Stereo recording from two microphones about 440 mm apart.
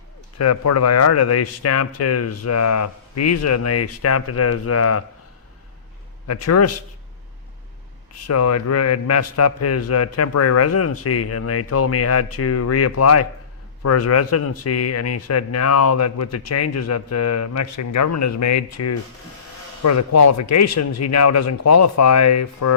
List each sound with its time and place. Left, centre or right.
0.3 s a man's voice: left
6.2 s a man's voice: left
8.3 s a man's voice: left